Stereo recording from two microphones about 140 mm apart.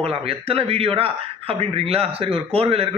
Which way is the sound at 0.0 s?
45° right (ahead or behind).